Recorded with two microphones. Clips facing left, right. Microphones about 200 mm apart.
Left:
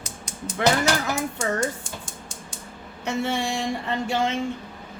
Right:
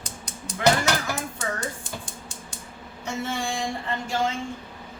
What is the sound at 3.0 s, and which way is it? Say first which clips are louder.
Speech: left 5 dB; 70° left (ahead or behind).